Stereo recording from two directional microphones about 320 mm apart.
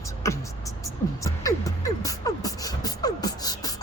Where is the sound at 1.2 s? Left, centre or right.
Centre.